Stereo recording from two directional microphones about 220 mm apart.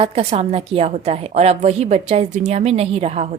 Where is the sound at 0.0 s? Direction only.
30° right (ahead or behind).